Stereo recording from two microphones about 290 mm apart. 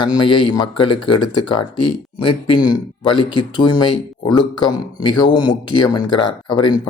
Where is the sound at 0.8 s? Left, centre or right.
Centre.